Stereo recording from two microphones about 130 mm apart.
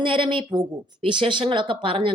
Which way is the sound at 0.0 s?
40° right (ahead or behind).